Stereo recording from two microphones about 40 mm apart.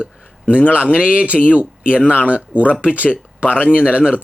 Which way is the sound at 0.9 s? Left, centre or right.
Right.